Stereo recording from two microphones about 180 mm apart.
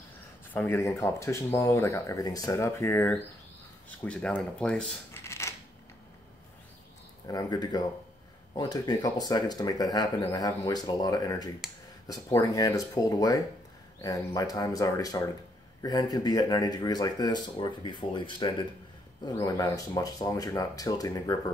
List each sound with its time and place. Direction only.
0.5 s speech: 10° left (ahead or behind)
7.2 s speech: 20° left (ahead or behind)